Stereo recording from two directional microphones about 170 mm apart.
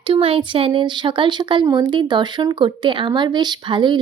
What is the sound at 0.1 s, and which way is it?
Speech, 30° right (ahead or behind).